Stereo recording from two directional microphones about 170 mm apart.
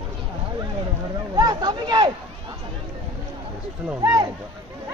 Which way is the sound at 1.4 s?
25° right (ahead or behind).